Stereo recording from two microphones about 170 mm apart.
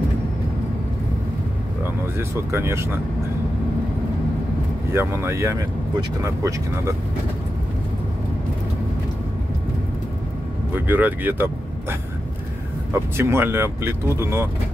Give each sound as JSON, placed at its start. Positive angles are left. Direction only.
{"t": 2.1, "sound": "speech", "side_deg": -15}
{"t": 4.9, "sound": "speech", "side_deg": -15}
{"t": 10.9, "sound": "speech", "side_deg": -10}
{"t": 12.9, "sound": "speech", "side_deg": -15}